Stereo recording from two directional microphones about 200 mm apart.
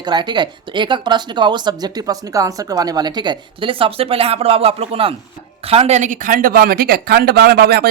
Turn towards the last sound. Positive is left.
turn(degrees=-50)  # may be behind; listen again after turning